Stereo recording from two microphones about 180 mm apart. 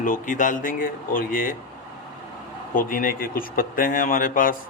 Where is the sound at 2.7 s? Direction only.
50° left (ahead or behind).